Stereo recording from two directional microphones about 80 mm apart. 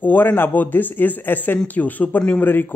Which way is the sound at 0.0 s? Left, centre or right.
Left.